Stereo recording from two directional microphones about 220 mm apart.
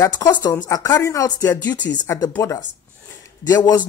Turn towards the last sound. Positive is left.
turn(degrees=15)  # may be behind; listen again after turning